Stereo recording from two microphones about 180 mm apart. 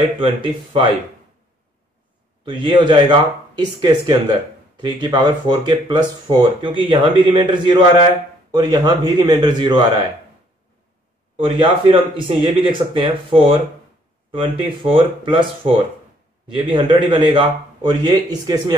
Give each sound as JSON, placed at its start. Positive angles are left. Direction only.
{"t": 0.2, "sound": "speech", "side_deg": -25}
{"t": 2.4, "sound": "speech", "side_deg": -25}
{"t": 11.3, "sound": "speech", "side_deg": -30}